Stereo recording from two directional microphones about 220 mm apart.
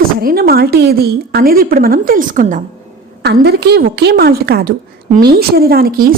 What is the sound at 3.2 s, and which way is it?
A woman's voice, 50° right (ahead or behind).